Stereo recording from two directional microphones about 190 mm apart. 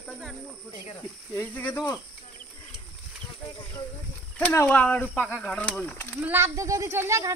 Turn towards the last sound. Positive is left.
turn(degrees=-15)  # may be behind; listen again after turning